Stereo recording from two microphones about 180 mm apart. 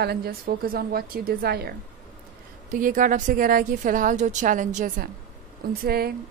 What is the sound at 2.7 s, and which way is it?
A woman's voice, 45° right (ahead or behind).